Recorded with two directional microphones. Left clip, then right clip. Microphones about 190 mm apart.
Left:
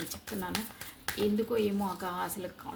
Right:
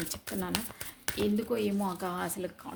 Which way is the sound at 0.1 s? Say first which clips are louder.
Right 2 dB; 55° right (ahead or behind).